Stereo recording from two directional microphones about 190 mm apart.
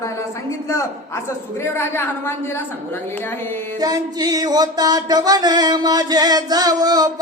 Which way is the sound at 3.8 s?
20° right (ahead or behind).